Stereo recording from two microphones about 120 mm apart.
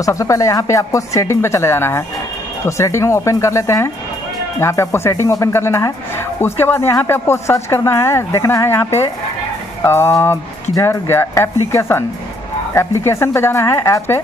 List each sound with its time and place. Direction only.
0.0 s speech: 25° left (ahead or behind)